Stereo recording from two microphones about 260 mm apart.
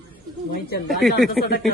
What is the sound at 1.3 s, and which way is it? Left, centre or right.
Speech, left.